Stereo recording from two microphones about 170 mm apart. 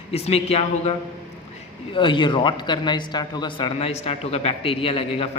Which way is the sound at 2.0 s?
30° left (ahead or behind).